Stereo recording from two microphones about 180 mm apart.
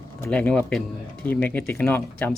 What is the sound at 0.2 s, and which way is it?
Speech, 5° left (ahead or behind).